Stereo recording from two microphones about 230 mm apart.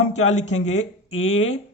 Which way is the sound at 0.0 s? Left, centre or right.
Left.